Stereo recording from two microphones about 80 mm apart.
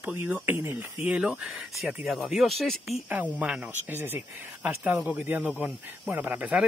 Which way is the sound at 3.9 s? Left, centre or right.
Right.